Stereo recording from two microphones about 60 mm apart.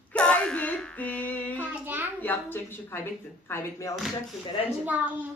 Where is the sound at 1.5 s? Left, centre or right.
Right.